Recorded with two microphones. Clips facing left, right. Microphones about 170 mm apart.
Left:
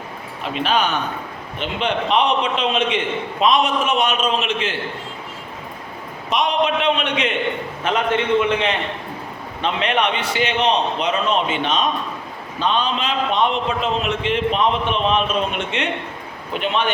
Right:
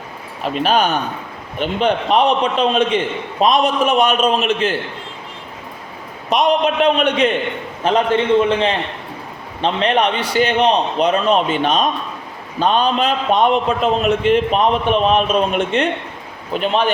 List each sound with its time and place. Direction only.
0.4 s a man's voice: 40° right (ahead or behind)
6.3 s a man's voice: 40° right (ahead or behind)